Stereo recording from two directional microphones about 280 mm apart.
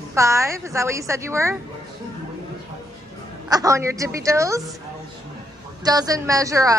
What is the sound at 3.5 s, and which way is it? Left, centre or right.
A woman's voice, centre.